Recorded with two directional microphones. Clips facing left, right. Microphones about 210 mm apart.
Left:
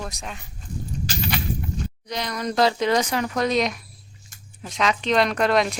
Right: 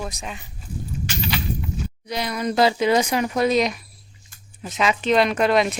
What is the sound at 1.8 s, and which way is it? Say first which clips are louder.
Speech: right 2 dB; 10° right (ahead or behind).